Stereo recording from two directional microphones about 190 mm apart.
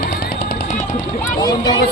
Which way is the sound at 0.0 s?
55° left (ahead or behind).